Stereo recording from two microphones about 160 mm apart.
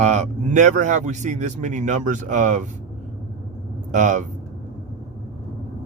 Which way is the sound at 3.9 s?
50° right (ahead or behind).